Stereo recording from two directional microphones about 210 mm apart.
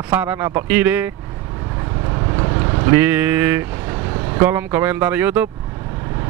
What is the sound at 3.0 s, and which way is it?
Speech, 10° right (ahead or behind).